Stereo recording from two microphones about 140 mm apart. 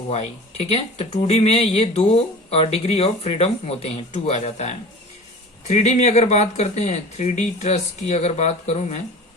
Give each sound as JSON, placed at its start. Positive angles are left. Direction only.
{"t": 0.1, "sound": "speech", "side_deg": 50}